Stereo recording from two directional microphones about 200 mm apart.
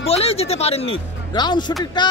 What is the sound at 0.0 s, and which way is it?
Speech, 30° left (ahead or behind).